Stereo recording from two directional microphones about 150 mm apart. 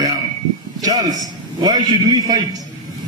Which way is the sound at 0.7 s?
25° right (ahead or behind).